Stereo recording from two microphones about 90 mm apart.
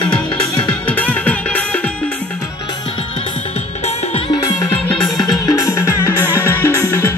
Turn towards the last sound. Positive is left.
turn(degrees=25)  # may be behind; listen again after turning